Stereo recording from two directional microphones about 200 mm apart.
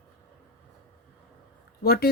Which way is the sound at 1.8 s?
50° left (ahead or behind).